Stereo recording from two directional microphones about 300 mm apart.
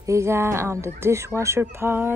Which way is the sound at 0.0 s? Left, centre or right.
Centre.